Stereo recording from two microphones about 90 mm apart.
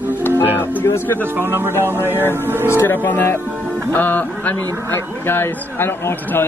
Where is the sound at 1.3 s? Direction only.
25° right (ahead or behind).